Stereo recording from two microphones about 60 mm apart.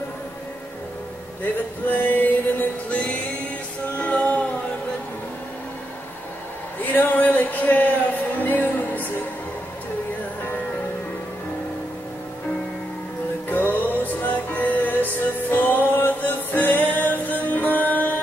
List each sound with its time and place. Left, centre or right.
1.4 s male singing: left
2.9 s music: left
6.8 s a sound: left
13.5 s music: left